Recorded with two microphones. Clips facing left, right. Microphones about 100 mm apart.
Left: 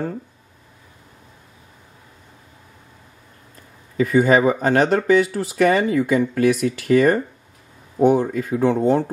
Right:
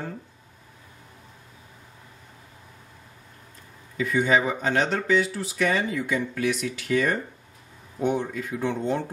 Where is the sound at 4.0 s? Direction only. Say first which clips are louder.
Left 7 dB; 45° left (ahead or behind).